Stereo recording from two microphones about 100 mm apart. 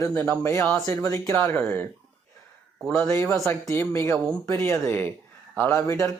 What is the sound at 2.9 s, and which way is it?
Speech, 25° left (ahead or behind).